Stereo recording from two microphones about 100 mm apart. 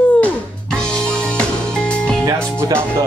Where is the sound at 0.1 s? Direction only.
15° left (ahead or behind).